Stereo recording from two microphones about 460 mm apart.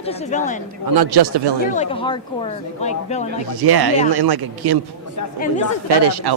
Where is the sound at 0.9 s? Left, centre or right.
Right.